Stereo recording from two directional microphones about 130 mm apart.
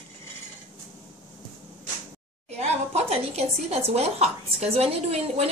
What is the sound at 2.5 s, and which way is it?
A woman's voice, 55° right (ahead or behind).